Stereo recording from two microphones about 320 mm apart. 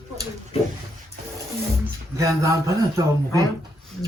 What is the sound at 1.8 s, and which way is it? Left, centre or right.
A man's voice, centre.